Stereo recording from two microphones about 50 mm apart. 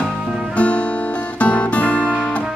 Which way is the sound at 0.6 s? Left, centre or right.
Left.